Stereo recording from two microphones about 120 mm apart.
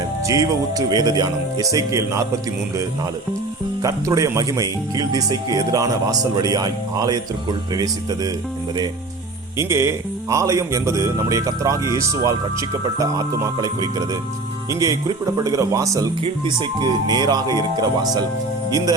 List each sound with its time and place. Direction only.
0.3 s speech: 30° right (ahead or behind)
3.8 s speech: 25° right (ahead or behind)
9.6 s speech: 25° right (ahead or behind)
16.2 s speech: 40° right (ahead or behind)